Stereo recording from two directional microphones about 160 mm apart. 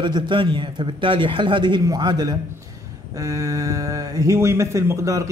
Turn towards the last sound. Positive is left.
turn(degrees=-20)  # may be behind; listen again after turning